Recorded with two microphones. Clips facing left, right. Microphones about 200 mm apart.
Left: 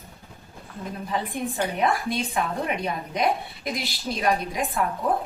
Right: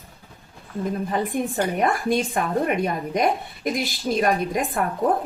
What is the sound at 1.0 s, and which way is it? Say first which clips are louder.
A woman's voice: even; 45° right (ahead or behind).